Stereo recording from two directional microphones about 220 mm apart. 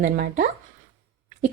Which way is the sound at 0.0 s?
40° right (ahead or behind).